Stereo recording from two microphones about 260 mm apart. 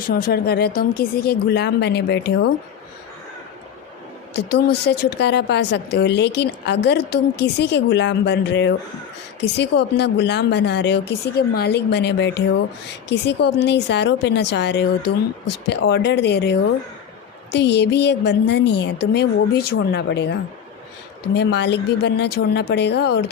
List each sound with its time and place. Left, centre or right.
0.1 s speech: left
4.5 s speech: left
21.3 s speech: left